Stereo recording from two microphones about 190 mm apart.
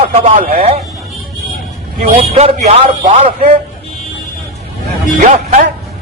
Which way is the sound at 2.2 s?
35° right (ahead or behind).